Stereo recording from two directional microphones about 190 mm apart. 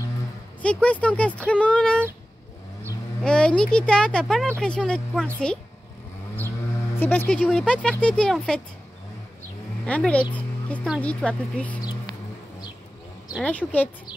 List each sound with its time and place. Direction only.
0.6 s speech: 5° left (ahead or behind)
3.3 s speech: 5° left (ahead or behind)
7.0 s speech: 10° left (ahead or behind)
9.8 s speech: 5° left (ahead or behind)
10.3 s music: 5° left (ahead or behind)
11.0 s speech: 5° left (ahead or behind)
11.8 s a sound: 20° left (ahead or behind)
13.3 s speech: 5° left (ahead or behind)